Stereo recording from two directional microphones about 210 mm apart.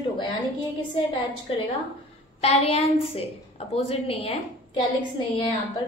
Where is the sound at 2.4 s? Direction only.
30° left (ahead or behind).